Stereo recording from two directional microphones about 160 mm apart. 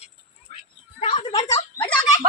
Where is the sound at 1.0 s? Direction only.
40° left (ahead or behind).